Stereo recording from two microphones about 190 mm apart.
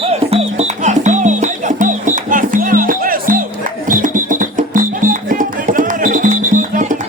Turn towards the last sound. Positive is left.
turn(degrees=-40)  # may be behind; listen again after turning